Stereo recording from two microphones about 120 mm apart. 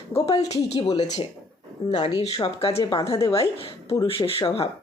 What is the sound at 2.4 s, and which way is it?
Speech, 55° left (ahead or behind).